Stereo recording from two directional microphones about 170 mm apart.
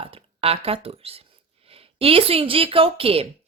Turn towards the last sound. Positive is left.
turn(degrees=-35)  # may be behind; listen again after turning